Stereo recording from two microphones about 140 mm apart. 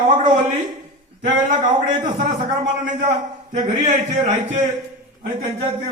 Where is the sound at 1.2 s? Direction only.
60° right (ahead or behind).